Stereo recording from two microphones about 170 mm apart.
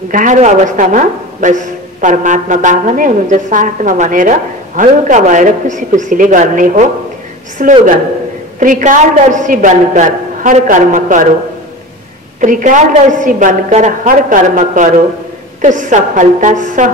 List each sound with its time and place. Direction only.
0.1 s a man's voice: 50° right (ahead or behind)
12.4 s a man's voice: 50° right (ahead or behind)